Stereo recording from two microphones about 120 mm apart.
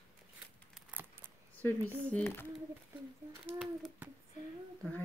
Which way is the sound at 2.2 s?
15° left (ahead or behind).